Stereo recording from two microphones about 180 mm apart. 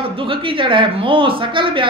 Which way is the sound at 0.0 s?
30° right (ahead or behind).